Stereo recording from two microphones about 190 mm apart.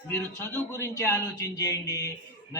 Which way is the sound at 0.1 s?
10° left (ahead or behind).